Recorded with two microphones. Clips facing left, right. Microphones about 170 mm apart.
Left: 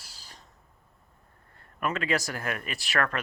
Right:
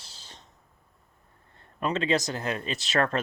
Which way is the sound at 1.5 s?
25° right (ahead or behind).